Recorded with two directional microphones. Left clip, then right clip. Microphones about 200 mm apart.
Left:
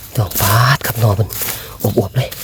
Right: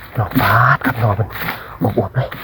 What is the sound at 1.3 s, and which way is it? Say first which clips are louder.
Speech: right 2 dB; 40° left (ahead or behind).